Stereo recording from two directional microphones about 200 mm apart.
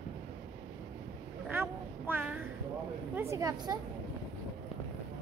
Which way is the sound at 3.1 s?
15° right (ahead or behind).